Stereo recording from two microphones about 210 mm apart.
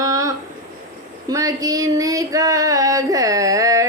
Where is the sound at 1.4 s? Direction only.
15° right (ahead or behind).